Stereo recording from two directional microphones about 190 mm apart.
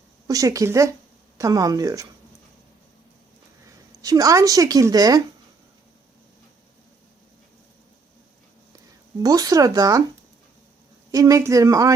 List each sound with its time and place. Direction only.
0.3 s a woman's voice: 15° right (ahead or behind)
4.0 s a woman's voice: 20° right (ahead or behind)
9.2 s a woman's voice: 20° right (ahead or behind)
11.1 s speech: 20° right (ahead or behind)